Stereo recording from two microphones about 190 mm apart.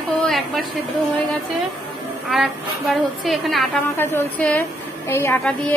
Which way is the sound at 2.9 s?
Centre (ahead or behind).